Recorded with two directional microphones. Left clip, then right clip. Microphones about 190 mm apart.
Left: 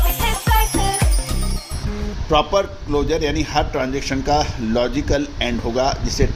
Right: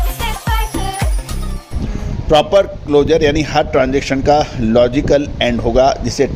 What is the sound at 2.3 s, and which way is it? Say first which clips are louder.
A man's voice: right 6 dB; 50° right (ahead or behind).